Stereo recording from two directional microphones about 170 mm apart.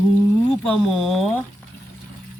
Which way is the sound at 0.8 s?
Centre (ahead or behind).